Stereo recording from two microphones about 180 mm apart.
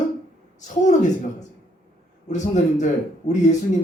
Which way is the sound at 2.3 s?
45° left (ahead or behind).